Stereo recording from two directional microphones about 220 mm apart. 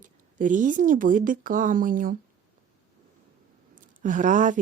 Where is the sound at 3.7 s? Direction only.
35° right (ahead or behind).